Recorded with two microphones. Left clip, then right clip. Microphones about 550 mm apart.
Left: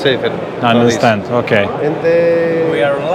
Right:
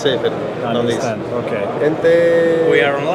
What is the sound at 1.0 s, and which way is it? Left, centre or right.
Speech, left.